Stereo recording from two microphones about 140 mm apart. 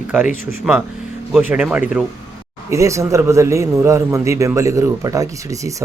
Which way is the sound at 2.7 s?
20° right (ahead or behind).